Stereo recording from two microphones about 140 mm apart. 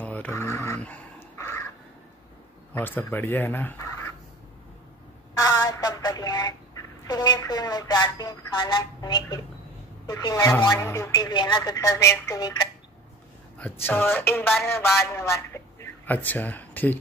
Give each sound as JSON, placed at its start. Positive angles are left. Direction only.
{"t": 0.0, "sound": "dog", "side_deg": 10}
{"t": 0.7, "sound": "dog", "side_deg": 10}
{"t": 2.7, "sound": "speech", "side_deg": 15}
{"t": 5.4, "sound": "a sound", "side_deg": 25}
{"t": 7.1, "sound": "speech", "side_deg": 30}
{"t": 13.6, "sound": "speech", "side_deg": 15}